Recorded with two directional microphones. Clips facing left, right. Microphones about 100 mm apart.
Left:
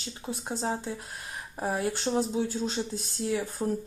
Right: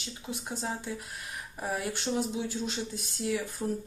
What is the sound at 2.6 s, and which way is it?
A woman's voice, 30° left (ahead or behind).